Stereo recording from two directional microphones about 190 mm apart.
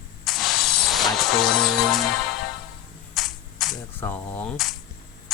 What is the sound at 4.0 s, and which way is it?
Speech, 10° left (ahead or behind).